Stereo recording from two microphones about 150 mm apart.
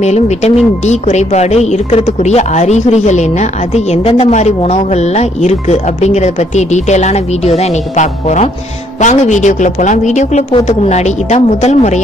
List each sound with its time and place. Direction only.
0.0 s a woman's voice: 50° left (ahead or behind)